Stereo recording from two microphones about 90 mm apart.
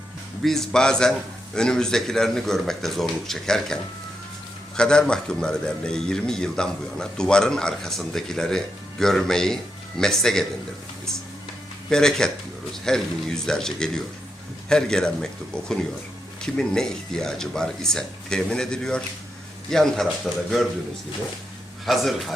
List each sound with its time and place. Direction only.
0.4 s a man's voice: 5° left (ahead or behind)
4.8 s a man's voice: 10° left (ahead or behind)
11.9 s a man's voice: 5° left (ahead or behind)
21.8 s speech: centre (ahead or behind)